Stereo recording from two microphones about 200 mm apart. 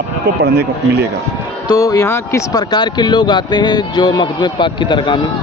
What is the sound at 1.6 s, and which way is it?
Speech, 20° left (ahead or behind).